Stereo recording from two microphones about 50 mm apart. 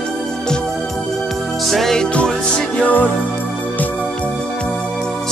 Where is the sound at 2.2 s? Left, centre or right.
Centre.